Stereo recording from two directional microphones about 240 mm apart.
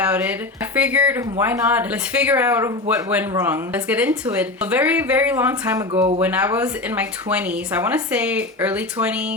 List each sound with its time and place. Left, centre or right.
0.0 s a sound: centre
0.8 s speech: centre
5.9 s speech: right
6.2 s speech: centre